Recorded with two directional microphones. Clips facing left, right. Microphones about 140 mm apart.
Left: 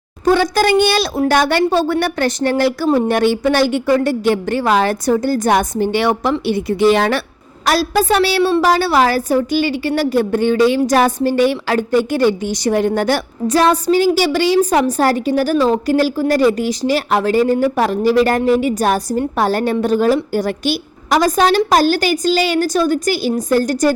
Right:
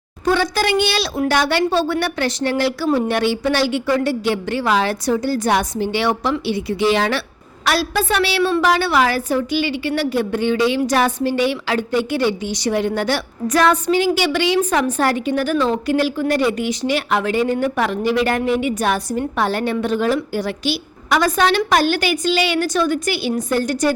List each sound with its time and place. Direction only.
0.3 s a woman's voice: 45° left (ahead or behind)
13.5 s a woman's voice: 30° left (ahead or behind)